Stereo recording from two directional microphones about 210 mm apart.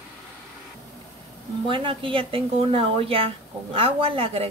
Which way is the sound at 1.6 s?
25° right (ahead or behind).